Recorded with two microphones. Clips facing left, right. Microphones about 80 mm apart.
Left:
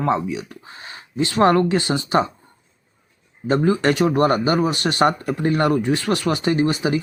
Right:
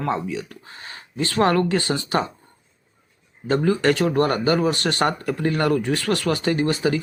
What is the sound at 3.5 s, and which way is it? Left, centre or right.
Speech, left.